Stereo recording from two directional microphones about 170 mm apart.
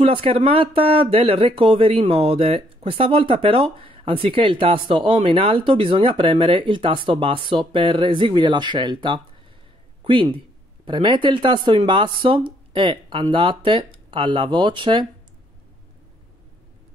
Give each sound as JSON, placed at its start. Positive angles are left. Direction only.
{"t": 0.0, "sound": "speech", "side_deg": -35}